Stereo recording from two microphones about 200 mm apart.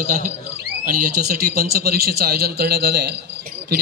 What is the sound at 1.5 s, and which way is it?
A man's voice, 50° right (ahead or behind).